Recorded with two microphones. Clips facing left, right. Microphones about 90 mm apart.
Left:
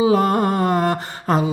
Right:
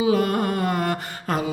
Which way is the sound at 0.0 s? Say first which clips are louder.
Left 4 dB; 30° left (ahead or behind).